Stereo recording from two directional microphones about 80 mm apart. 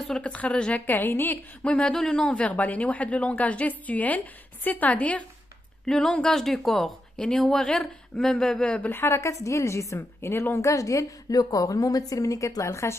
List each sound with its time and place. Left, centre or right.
0.2 s a woman's voice: centre
5.9 s a woman's voice: centre
8.8 s a woman's voice: left